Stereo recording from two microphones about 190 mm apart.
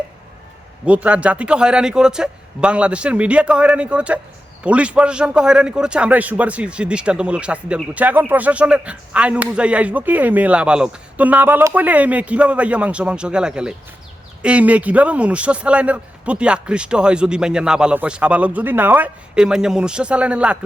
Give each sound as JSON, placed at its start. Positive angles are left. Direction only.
{"t": 0.9, "sound": "a man's voice", "side_deg": -5}